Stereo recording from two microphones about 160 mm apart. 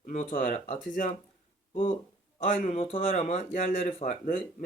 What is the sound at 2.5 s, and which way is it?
Speech, 45° left (ahead or behind).